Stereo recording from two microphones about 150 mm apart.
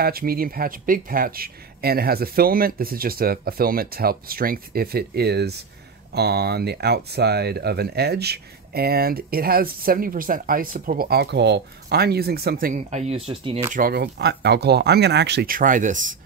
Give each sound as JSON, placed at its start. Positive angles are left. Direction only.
{"t": 0.0, "sound": "speech", "side_deg": -85}
{"t": 12.7, "sound": "speech", "side_deg": -45}
{"t": 13.7, "sound": "speech", "side_deg": -75}